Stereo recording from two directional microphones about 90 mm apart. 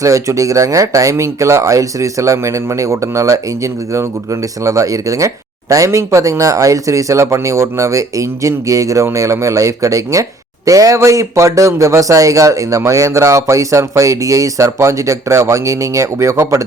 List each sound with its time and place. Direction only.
0.0 s speech: 35° right (ahead or behind)